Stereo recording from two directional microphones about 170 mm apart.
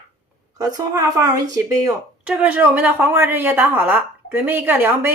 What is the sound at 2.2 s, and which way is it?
Speech, 10° right (ahead or behind).